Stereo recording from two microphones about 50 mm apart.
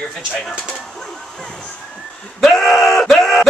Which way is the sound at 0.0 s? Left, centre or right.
Centre.